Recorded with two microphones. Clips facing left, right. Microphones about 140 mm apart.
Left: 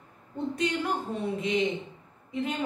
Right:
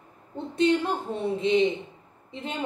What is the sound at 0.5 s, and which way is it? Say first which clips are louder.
A woman's voice: right 8 dB; 25° right (ahead or behind).